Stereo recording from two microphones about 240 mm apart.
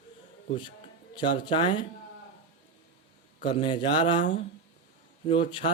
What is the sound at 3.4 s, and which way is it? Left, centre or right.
Speech, left.